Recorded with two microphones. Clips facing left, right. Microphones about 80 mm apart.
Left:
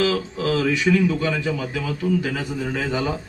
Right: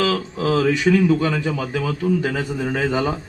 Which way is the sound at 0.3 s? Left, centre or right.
Right.